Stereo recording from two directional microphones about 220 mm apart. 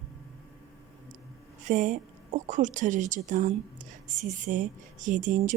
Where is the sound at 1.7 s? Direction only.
35° right (ahead or behind).